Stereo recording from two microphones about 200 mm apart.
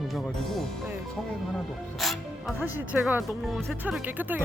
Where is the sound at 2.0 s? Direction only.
Centre (ahead or behind).